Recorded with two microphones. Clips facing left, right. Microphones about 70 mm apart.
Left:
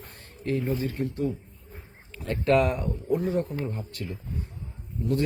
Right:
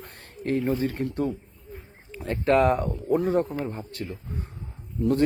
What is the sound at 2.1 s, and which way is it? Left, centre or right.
Speech, right.